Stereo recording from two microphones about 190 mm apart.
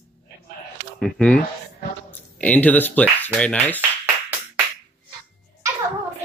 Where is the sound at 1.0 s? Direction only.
5° left (ahead or behind).